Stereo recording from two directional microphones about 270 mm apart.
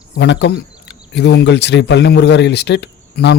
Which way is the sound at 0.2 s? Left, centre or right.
Left.